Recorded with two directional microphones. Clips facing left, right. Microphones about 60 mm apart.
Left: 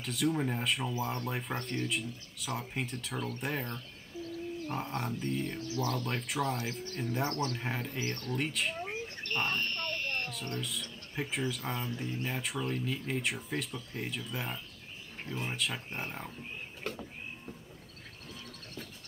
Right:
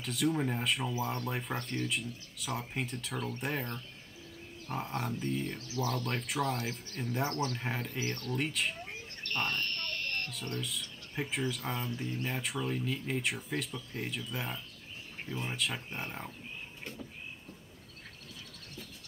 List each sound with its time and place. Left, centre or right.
0.0 s speech: centre
8.8 s a sound: left
10.3 s speech: centre